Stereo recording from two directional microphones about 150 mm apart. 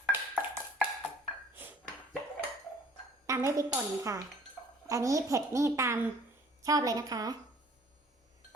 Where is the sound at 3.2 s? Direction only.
20° right (ahead or behind).